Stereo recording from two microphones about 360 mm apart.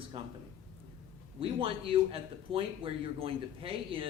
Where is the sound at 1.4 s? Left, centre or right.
Centre.